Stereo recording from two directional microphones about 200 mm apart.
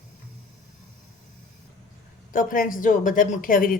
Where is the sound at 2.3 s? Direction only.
45° left (ahead or behind).